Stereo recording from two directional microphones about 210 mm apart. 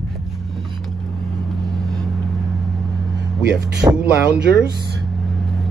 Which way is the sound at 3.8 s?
15° right (ahead or behind).